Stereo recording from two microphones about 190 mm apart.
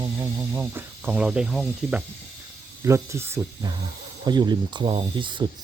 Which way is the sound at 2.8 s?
15° right (ahead or behind).